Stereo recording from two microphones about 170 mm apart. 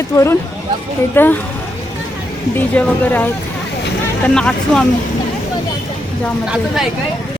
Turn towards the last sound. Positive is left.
turn(degrees=-5)  # may be behind; listen again after turning